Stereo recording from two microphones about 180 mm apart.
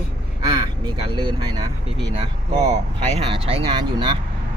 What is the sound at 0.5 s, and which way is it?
Speech, 25° right (ahead or behind).